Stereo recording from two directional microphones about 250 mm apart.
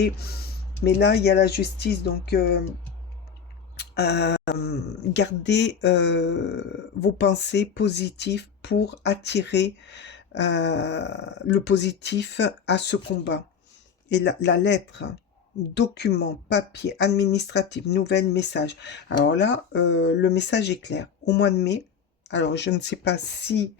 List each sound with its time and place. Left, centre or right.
0.0 s speech: left
3.8 s speech: left